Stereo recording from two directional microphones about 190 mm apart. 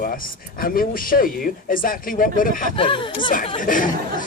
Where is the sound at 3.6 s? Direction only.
45° left (ahead or behind).